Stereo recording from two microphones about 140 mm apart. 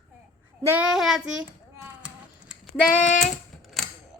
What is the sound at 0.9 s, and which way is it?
Child singing, 5° right (ahead or behind).